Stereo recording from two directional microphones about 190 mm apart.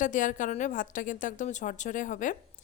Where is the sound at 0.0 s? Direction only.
45° left (ahead or behind).